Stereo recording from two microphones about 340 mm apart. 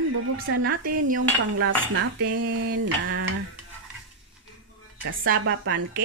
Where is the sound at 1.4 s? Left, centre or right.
Right.